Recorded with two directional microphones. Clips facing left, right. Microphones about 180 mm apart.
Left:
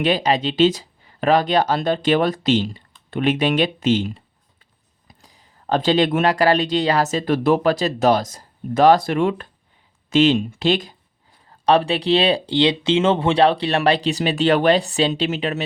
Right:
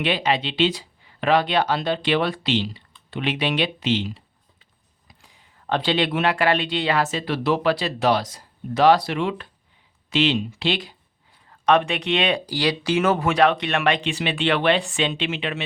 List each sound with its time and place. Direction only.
0.0 s speech: 40° left (ahead or behind)